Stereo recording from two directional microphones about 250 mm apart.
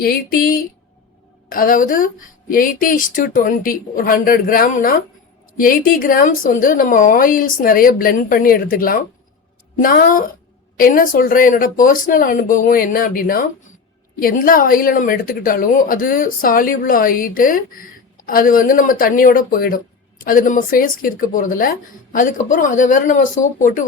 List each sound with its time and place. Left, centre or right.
0.0 s a woman's voice: left